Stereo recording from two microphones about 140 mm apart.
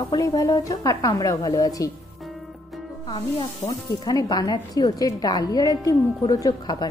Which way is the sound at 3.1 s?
30° left (ahead or behind).